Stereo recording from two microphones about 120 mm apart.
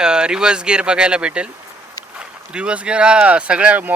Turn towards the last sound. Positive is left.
turn(degrees=-10)  # may be behind; listen again after turning